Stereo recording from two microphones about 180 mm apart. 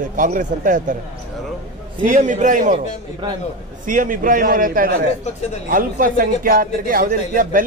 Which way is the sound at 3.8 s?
50° right (ahead or behind).